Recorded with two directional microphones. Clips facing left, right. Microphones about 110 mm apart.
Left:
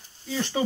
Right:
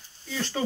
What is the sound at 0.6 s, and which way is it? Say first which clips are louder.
Speech: left 2 dB; 15° left (ahead or behind).